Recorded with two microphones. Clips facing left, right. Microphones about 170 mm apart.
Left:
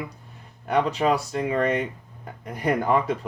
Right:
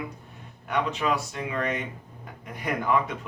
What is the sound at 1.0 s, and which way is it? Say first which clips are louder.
Speech: left 5 dB; 30° left (ahead or behind).